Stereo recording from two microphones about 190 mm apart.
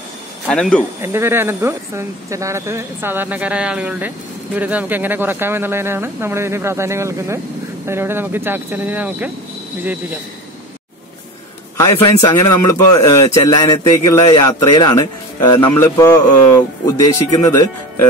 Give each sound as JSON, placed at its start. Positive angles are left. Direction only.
{"t": 0.5, "sound": "speech", "side_deg": 5}
{"t": 1.0, "sound": "speech", "side_deg": -10}
{"t": 12.0, "sound": "speech", "side_deg": 20}
{"t": 15.7, "sound": "speech", "side_deg": 10}